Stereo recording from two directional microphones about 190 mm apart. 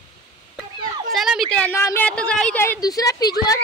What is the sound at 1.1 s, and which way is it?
A woman's voice, centre (ahead or behind).